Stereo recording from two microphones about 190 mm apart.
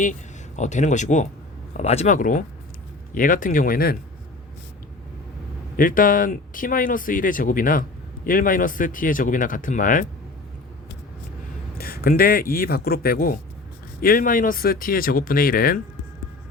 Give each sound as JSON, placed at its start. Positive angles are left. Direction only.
{"t": 0.0, "sound": "speech", "side_deg": 40}
{"t": 5.7, "sound": "speech", "side_deg": 45}
{"t": 11.8, "sound": "speech", "side_deg": 50}